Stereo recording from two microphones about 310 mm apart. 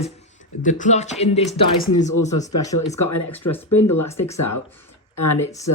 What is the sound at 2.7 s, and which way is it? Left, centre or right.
Speech, left.